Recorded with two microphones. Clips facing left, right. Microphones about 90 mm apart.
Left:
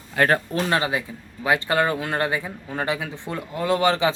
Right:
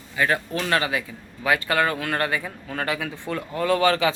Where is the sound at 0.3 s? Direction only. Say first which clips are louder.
Left 2 dB; 30° left (ahead or behind).